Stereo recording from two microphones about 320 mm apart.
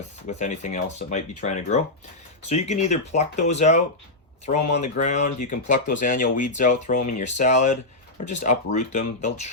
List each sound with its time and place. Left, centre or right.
0.3 s speech: left
4.9 s speech: left